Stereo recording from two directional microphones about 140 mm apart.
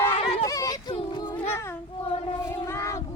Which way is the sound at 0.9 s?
35° left (ahead or behind).